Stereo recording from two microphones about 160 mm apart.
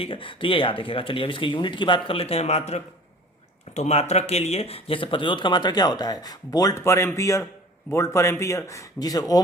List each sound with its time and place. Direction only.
0.0 s speech: 35° left (ahead or behind)